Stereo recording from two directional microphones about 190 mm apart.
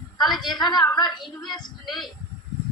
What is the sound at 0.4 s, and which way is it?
Speech, 20° left (ahead or behind).